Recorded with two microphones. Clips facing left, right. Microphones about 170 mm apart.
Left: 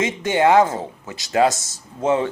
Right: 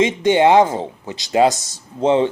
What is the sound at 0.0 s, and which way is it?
Speech, 20° right (ahead or behind).